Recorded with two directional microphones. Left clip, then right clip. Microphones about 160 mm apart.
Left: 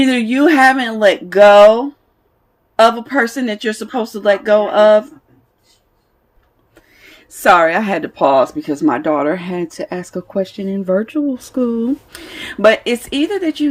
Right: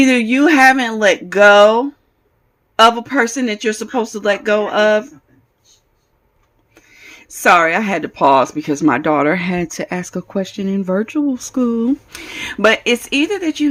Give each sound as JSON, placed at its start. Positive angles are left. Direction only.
{"t": 0.0, "sound": "speech", "side_deg": -25}
{"t": 6.7, "sound": "speech", "side_deg": -25}